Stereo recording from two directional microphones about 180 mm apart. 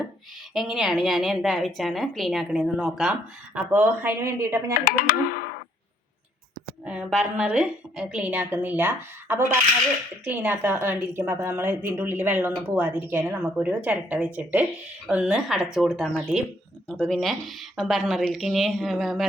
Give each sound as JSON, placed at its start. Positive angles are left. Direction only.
{"t": 0.5, "sound": "a woman's voice", "side_deg": 0}
{"t": 6.8, "sound": "a woman's voice", "side_deg": -5}